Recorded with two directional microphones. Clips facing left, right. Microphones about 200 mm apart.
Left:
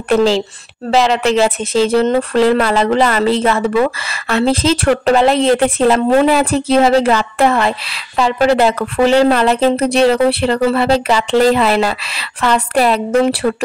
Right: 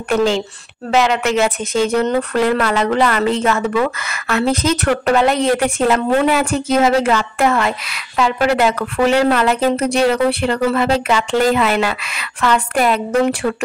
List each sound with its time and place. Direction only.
0.1 s speech: 35° left (ahead or behind)